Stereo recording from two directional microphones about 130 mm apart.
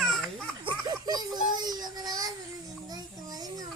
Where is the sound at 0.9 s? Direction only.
30° right (ahead or behind).